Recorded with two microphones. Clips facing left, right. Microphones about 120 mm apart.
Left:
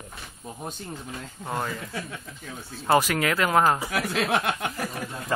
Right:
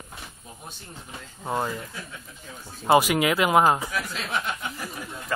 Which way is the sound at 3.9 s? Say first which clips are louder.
Left 5 dB; 65° left (ahead or behind).